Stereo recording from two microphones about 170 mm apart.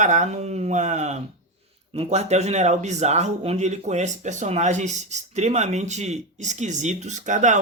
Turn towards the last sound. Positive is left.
turn(degrees=-45)  # may be behind; listen again after turning